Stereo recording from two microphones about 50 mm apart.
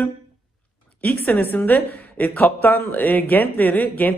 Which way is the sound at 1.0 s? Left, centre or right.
Left.